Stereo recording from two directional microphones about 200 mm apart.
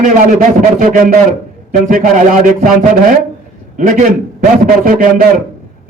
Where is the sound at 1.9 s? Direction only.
40° right (ahead or behind).